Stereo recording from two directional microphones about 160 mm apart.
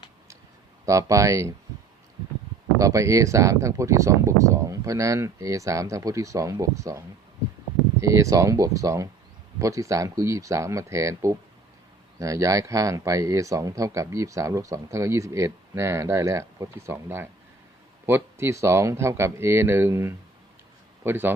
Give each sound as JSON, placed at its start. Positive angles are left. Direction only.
{"t": 0.9, "sound": "speech", "side_deg": -20}
{"t": 2.7, "sound": "speech", "side_deg": -20}
{"t": 8.0, "sound": "speech", "side_deg": -20}